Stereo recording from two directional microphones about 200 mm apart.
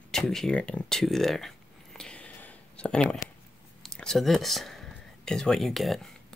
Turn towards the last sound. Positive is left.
turn(degrees=0)  # may be behind; listen again after turning